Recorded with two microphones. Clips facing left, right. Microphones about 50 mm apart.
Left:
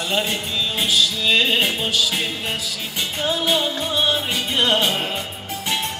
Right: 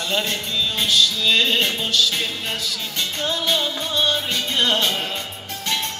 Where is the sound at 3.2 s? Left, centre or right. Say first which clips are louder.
Left 2 dB; centre.